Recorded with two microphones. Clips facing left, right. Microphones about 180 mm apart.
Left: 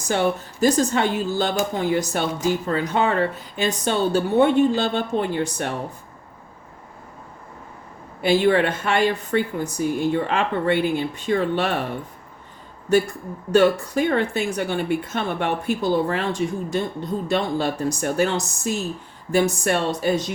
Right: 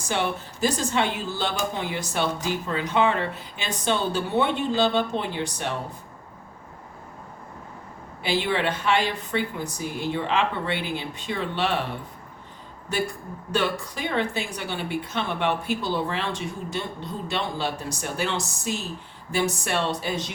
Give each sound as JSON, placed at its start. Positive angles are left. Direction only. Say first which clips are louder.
{"t": 0.1, "sound": "speech", "louder": "left 5 dB", "side_deg": 45}
{"t": 8.2, "sound": "speech", "louder": "left 7 dB", "side_deg": 45}
{"t": 13.5, "sound": "speech", "louder": "left 9 dB", "side_deg": 45}